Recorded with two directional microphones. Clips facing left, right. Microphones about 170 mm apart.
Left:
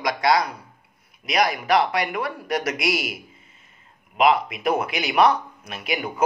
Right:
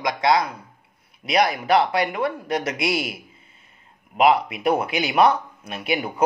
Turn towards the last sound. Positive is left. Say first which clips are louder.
# right 2 dB
turn(degrees=-35)  # may be behind; listen again after turning